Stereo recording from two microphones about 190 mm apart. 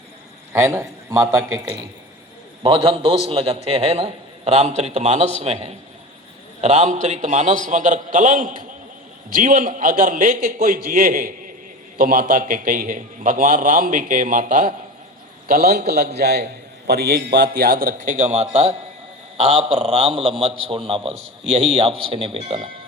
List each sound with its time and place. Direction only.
0.5 s a man's voice: 15° right (ahead or behind)
2.6 s a man's voice: 30° right (ahead or behind)